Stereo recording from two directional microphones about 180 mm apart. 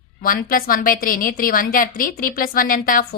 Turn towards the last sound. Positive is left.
turn(degrees=50)  # may be behind; listen again after turning